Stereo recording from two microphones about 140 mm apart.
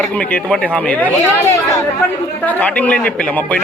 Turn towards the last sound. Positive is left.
turn(degrees=10)  # may be behind; listen again after turning